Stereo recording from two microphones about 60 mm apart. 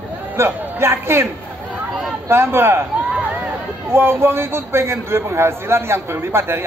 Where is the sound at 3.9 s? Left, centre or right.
Right.